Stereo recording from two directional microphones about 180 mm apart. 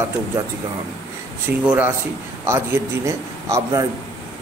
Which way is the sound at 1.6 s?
5° right (ahead or behind).